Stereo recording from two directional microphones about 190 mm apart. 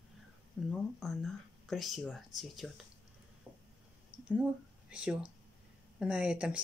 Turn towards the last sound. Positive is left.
turn(degrees=-5)  # may be behind; listen again after turning